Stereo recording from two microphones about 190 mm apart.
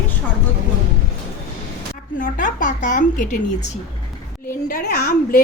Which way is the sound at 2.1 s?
45° left (ahead or behind).